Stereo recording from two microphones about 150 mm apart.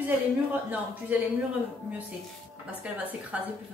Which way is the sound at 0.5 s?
10° right (ahead or behind).